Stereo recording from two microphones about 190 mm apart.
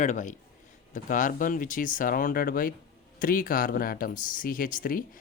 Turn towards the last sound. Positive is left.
turn(degrees=45)  # may be behind; listen again after turning